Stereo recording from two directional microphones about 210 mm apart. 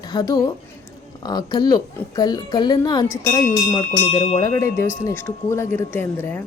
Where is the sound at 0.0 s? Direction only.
20° left (ahead or behind).